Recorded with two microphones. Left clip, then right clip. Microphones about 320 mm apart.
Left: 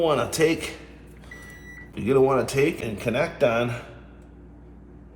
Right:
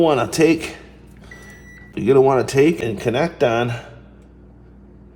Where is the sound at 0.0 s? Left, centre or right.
Right.